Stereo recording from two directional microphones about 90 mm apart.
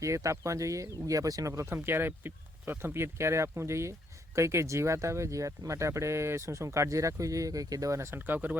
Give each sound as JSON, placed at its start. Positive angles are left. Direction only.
{"t": 0.0, "sound": "speech", "side_deg": -35}